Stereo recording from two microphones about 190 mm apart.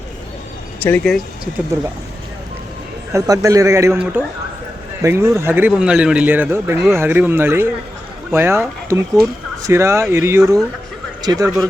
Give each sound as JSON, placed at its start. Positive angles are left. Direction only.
{"t": 0.8, "sound": "speech", "side_deg": 10}
{"t": 3.1, "sound": "a man's voice", "side_deg": -15}
{"t": 11.4, "sound": "speech", "side_deg": 0}